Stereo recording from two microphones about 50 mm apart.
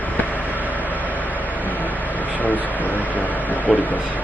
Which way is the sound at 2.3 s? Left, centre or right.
Left.